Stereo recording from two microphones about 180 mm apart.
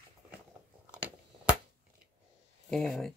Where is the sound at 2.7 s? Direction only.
Centre (ahead or behind).